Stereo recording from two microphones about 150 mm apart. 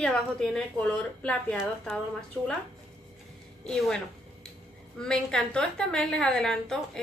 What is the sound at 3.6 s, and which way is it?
A woman's voice, 5° left (ahead or behind).